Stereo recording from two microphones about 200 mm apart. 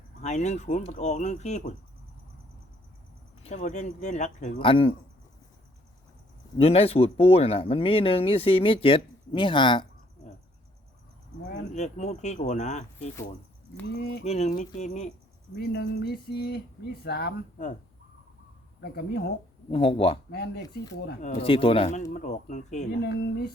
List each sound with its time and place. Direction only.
0.2 s speech: 35° left (ahead or behind)
3.4 s speech: 35° left (ahead or behind)
6.6 s speech: 30° left (ahead or behind)
11.7 s speech: 35° left (ahead or behind)
13.8 s speech: 55° left (ahead or behind)
14.3 s speech: 35° left (ahead or behind)
15.5 s a sound: 55° left (ahead or behind)
17.0 s speech: 55° left (ahead or behind)
18.8 s a sound: 55° left (ahead or behind)
19.7 s speech: 30° left (ahead or behind)
21.2 s speech: 40° left (ahead or behind)
21.4 s speech: 25° left (ahead or behind)
22.1 s speech: 40° left (ahead or behind)
22.9 s a sound: 55° left (ahead or behind)